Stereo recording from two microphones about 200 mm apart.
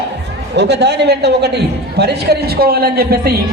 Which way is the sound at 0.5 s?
60° right (ahead or behind).